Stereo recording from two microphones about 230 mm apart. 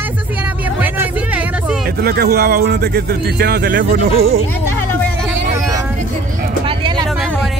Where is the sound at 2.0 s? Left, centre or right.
Right.